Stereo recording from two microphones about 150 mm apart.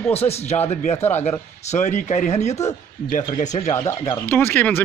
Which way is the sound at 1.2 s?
50° left (ahead or behind).